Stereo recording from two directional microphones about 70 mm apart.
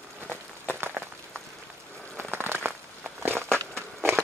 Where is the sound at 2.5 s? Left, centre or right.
Right.